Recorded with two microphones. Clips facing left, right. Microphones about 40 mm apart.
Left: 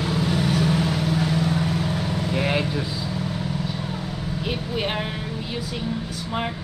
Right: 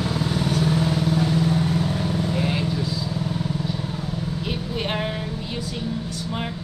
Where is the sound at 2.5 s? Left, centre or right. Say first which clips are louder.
Left 1 dB; left.